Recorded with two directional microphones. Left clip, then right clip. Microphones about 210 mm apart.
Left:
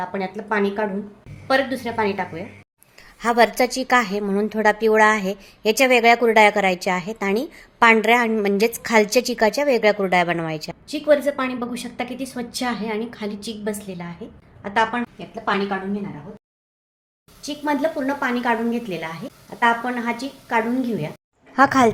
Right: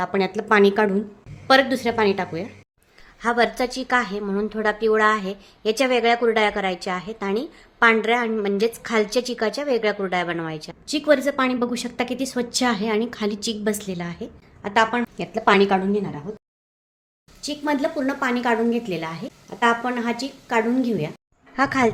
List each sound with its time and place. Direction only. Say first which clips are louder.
0.0 s a woman's voice: right 4 dB; 35° right (ahead or behind)
3.2 s a woman's voice: left 4 dB; 15° left (ahead or behind)
10.8 s a woman's voice: left 1 dB; 20° right (ahead or behind)
15.2 s a woman's voice: right 8 dB; 60° right (ahead or behind)
17.4 s a woman's voice: left 1 dB; 10° right (ahead or behind)
21.5 s speech: left 5 dB; 15° left (ahead or behind)